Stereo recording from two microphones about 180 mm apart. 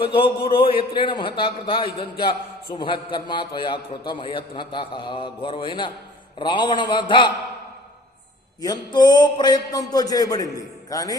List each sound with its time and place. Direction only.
0.0 s a man's voice: 30° left (ahead or behind)
8.6 s a man's voice: 20° left (ahead or behind)